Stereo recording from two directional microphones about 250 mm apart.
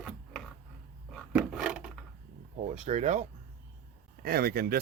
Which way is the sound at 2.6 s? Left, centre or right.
Right.